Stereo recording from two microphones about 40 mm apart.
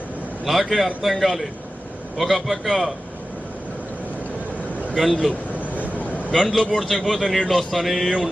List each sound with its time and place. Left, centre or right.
0.4 s a man's voice: centre
4.9 s a man's voice: centre
5.5 s vehicle: right
6.3 s a man's voice: centre